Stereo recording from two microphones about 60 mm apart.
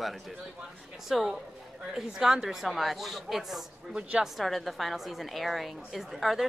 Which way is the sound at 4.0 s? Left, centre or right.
Centre.